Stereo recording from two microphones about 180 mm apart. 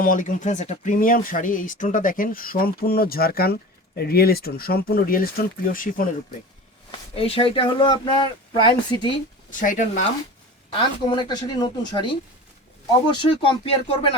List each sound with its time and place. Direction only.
0.0 s speech: 45° left (ahead or behind)
7.2 s speech: 30° left (ahead or behind)
9.5 s speech: 45° left (ahead or behind)
10.7 s speech: 25° left (ahead or behind)